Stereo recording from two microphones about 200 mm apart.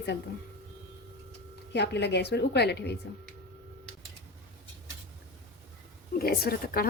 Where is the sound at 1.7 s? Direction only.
60° left (ahead or behind).